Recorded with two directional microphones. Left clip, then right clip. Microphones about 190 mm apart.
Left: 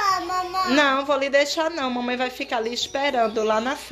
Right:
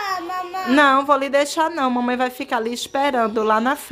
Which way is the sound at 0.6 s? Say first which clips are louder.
Right 6 dB; 30° right (ahead or behind).